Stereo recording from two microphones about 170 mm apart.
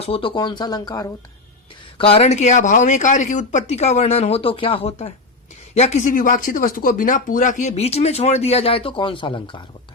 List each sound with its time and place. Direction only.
0.0 s speech: 30° left (ahead or behind)
2.0 s speech: 35° left (ahead or behind)